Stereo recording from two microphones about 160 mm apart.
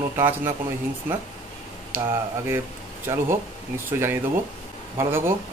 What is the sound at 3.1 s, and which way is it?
Speech, 15° right (ahead or behind).